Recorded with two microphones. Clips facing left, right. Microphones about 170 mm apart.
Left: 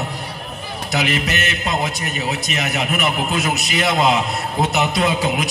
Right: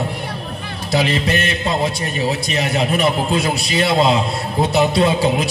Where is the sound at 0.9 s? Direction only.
30° right (ahead or behind).